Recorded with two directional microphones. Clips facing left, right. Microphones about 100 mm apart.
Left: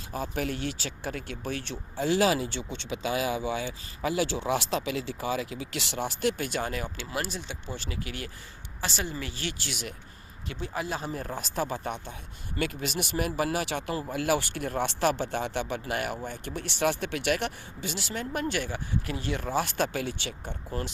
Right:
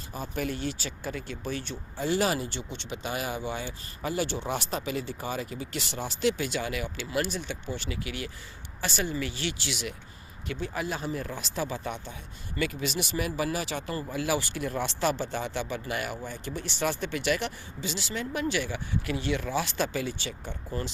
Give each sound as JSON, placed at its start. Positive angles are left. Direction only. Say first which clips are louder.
{"t": 0.1, "sound": "speech", "louder": "left 1 dB", "side_deg": 80}
{"t": 5.7, "sound": "speech", "louder": "left 4 dB", "side_deg": 75}
{"t": 8.8, "sound": "speech", "louder": "right 3 dB", "side_deg": 30}
{"t": 10.5, "sound": "speech", "louder": "right 1 dB", "side_deg": 30}